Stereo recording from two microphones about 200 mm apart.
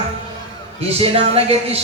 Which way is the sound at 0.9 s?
30° right (ahead or behind).